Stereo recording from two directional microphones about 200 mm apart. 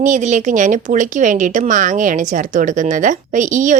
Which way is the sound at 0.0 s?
40° right (ahead or behind).